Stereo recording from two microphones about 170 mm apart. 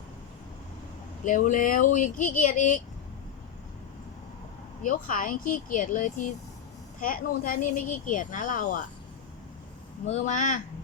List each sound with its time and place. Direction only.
1.2 s speech: 50° left (ahead or behind)
4.8 s speech: 50° left (ahead or behind)
10.1 s speech: 45° left (ahead or behind)